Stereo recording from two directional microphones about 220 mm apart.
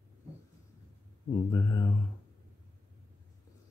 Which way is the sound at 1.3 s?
15° left (ahead or behind).